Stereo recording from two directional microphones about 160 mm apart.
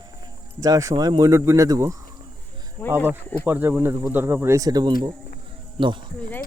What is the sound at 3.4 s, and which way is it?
Speech, 10° right (ahead or behind).